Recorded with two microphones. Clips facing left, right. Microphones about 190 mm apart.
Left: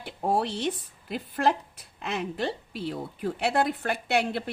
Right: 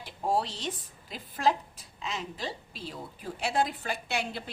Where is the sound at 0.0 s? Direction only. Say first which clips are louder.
Left 3 dB; 60° left (ahead or behind).